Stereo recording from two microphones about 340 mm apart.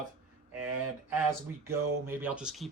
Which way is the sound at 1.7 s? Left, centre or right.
Centre.